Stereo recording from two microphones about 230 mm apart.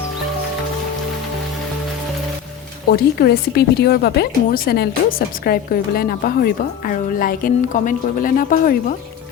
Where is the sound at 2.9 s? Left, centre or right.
Left.